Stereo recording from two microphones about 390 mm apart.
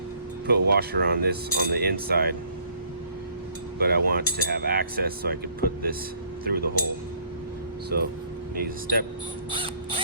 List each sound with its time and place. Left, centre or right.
0.4 s speech: right
3.8 s speech: right
7.9 s speech: right
9.5 s creak: centre